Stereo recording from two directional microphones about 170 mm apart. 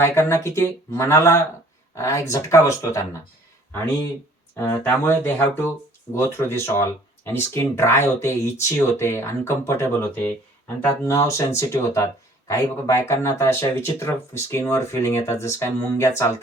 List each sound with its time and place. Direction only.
0.0 s speech: 15° left (ahead or behind)
4.5 s speech: 15° left (ahead or behind)